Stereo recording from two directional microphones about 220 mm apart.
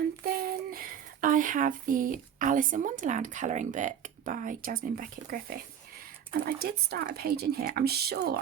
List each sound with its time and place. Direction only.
0.3 s speech: 40° right (ahead or behind)